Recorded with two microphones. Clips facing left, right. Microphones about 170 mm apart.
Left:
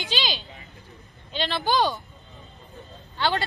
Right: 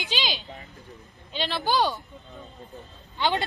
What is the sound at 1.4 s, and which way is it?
Speech, 10° right (ahead or behind).